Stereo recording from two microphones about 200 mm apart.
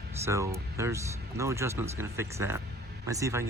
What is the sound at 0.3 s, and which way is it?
Speech, 15° right (ahead or behind).